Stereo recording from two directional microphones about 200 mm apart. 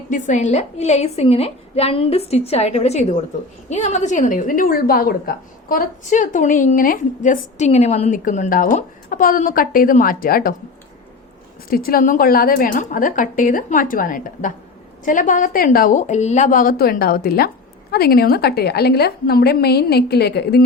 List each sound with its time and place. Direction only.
0.1 s a woman's voice: 35° left (ahead or behind)
11.7 s a woman's voice: 45° left (ahead or behind)